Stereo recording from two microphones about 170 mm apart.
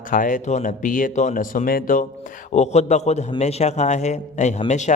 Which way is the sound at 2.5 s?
40° left (ahead or behind).